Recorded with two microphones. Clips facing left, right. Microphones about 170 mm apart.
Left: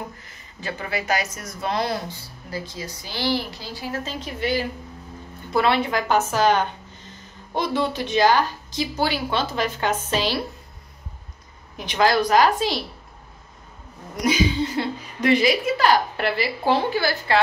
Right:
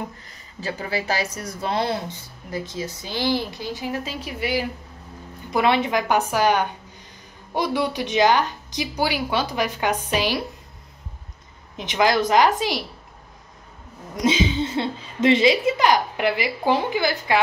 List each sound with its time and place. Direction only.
0.6 s a woman's voice: 35° right (ahead or behind); by 10.4 s 15° right (ahead or behind)
11.7 s a woman's voice: 20° right (ahead or behind)
14.1 s a woman's voice: 25° right (ahead or behind)